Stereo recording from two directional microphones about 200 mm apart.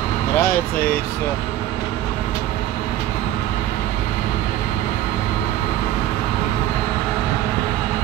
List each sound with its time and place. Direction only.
0.4 s speech: 50° left (ahead or behind)